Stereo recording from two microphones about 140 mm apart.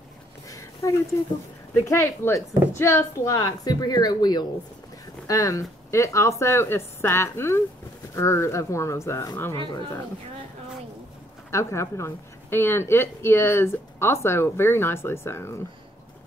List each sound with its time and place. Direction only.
0.5 s a sound: 25° left (ahead or behind)
1.9 s speech: 20° left (ahead or behind)
11.5 s a woman's voice: 20° left (ahead or behind)